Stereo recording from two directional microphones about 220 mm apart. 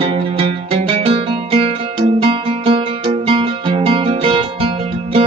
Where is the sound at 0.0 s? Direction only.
25° right (ahead or behind).